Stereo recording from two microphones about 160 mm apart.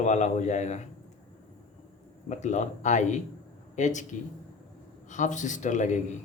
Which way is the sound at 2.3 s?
50° left (ahead or behind).